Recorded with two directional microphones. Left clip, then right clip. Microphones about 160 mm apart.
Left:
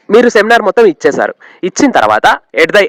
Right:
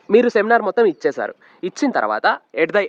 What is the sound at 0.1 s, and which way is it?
Speech, 35° left (ahead or behind).